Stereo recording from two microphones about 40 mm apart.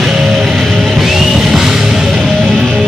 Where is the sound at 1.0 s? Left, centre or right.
Centre.